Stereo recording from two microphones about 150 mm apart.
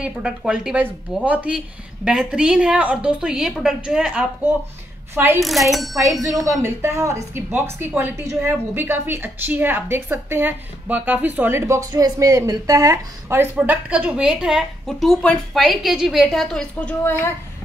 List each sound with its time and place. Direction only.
0.0 s a woman's voice: 5° right (ahead or behind)
5.1 s a woman's voice: 15° right (ahead or behind)
5.4 s a woman's voice: centre (ahead or behind)
6.2 s a woman's voice: 20° right (ahead or behind)
13.6 s a woman's voice: 10° right (ahead or behind); by 17.3 s 15° left (ahead or behind)